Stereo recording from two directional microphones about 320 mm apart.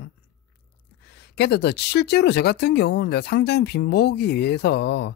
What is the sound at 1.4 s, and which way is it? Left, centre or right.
Speech, left.